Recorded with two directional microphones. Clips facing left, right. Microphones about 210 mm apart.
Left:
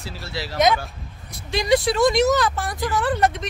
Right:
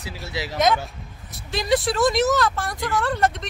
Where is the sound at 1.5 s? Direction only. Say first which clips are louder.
Left 2 dB; centre (ahead or behind).